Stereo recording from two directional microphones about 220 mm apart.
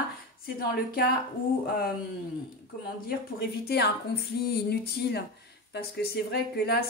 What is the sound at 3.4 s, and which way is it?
Speech, 45° left (ahead or behind).